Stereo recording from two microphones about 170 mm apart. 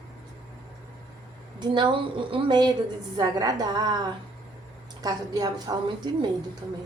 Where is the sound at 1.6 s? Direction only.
30° right (ahead or behind).